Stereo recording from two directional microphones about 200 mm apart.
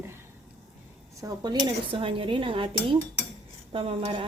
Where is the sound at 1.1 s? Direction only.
20° right (ahead or behind).